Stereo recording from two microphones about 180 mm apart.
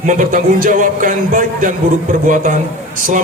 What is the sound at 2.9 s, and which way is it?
Speech, 50° right (ahead or behind).